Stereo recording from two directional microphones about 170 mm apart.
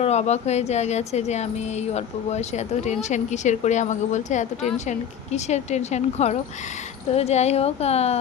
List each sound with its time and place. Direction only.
0.0 s speech: 40° left (ahead or behind)